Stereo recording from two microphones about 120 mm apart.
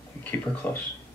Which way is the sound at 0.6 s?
15° left (ahead or behind).